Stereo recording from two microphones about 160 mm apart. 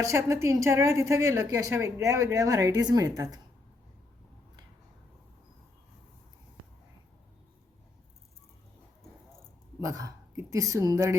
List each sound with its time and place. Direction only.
0.0 s a woman's voice: 20° right (ahead or behind)
9.8 s speech: 20° right (ahead or behind)